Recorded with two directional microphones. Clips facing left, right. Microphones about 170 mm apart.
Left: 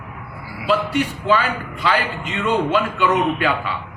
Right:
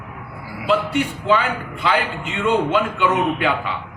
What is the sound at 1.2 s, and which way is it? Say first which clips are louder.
A man's voice: right 1 dB; 20° right (ahead or behind).